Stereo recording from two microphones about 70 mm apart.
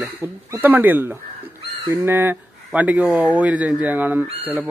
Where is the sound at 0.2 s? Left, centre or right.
Right.